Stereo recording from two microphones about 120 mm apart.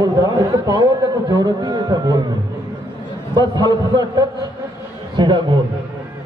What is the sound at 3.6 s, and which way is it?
A man's voice, 35° right (ahead or behind).